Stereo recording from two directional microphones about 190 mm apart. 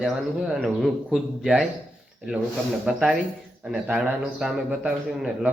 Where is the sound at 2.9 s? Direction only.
5° right (ahead or behind).